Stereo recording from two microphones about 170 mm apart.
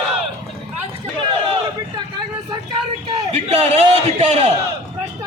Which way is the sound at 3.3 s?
40° right (ahead or behind).